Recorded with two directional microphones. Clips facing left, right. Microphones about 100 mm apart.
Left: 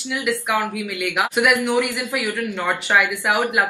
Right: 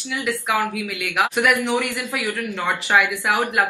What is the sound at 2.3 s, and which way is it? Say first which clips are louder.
Speech: left 1 dB; 15° left (ahead or behind).